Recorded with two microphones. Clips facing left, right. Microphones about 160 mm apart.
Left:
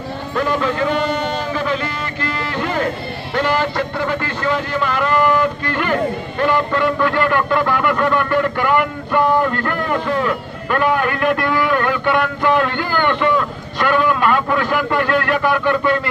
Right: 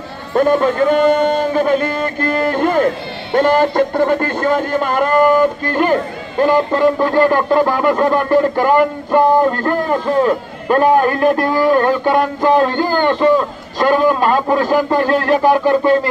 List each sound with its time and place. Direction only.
0.3 s music: 45° right (ahead or behind)
6.4 s a man's voice: 40° right (ahead or behind)